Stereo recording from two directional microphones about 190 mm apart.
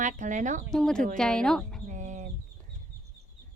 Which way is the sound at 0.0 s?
40° right (ahead or behind).